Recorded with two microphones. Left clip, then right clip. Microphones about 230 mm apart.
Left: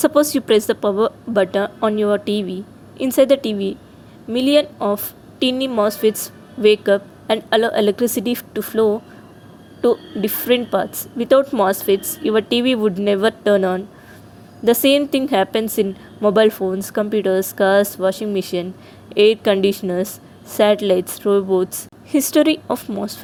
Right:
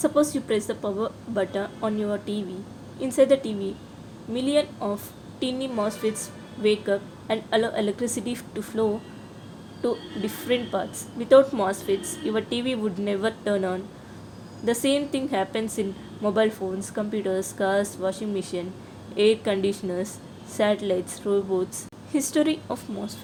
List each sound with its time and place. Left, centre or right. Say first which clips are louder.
0.0 s a woman's voice: left 7 dB; left